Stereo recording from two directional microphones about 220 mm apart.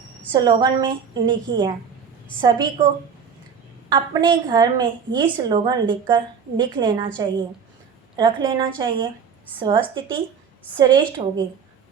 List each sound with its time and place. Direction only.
0.3 s a woman's voice: 20° right (ahead or behind)
3.8 s a woman's voice: 20° right (ahead or behind)
8.1 s a woman's voice: 20° right (ahead or behind)